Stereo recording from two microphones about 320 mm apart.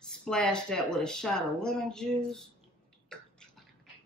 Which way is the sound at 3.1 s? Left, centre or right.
Centre.